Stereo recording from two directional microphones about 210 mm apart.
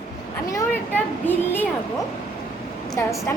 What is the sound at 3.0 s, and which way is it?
Speech, 10° left (ahead or behind).